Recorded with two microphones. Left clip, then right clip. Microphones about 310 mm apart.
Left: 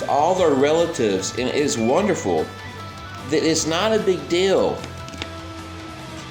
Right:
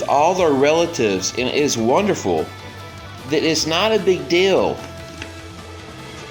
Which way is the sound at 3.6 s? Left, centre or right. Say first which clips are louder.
Right 2 dB; centre.